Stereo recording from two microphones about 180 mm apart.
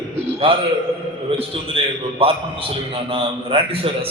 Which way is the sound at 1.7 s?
30° right (ahead or behind).